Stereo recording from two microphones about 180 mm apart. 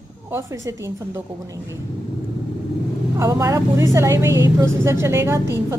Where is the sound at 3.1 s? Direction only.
15° right (ahead or behind).